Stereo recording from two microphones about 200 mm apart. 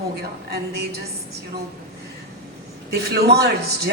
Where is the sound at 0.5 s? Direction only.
55° right (ahead or behind).